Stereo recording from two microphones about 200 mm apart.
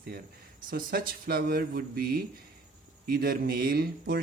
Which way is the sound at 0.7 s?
45° right (ahead or behind).